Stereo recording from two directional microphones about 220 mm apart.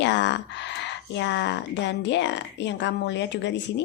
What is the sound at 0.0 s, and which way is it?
Speech, 55° left (ahead or behind).